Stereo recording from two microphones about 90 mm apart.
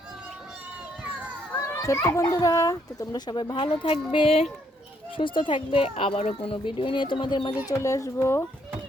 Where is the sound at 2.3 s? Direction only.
40° left (ahead or behind); by 3.9 s 70° left (ahead or behind).